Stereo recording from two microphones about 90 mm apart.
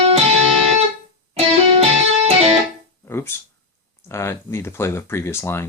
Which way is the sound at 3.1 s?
25° left (ahead or behind).